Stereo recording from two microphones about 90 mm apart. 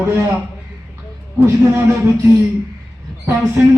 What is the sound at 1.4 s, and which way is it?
Speech, 25° right (ahead or behind).